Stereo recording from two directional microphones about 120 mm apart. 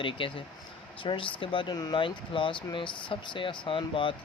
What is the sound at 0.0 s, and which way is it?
Speech, 45° left (ahead or behind).